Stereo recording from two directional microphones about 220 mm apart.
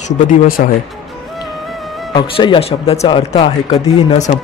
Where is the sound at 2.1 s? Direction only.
20° left (ahead or behind).